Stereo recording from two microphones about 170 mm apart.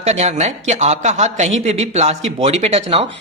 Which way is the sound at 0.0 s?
40° right (ahead or behind).